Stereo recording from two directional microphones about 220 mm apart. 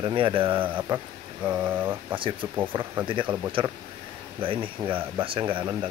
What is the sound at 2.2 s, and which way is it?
Speech, 25° right (ahead or behind).